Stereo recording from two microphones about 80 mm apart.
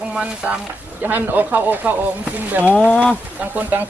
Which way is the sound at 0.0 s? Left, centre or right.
Centre.